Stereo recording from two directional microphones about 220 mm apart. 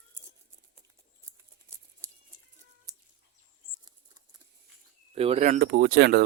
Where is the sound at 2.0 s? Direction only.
15° right (ahead or behind).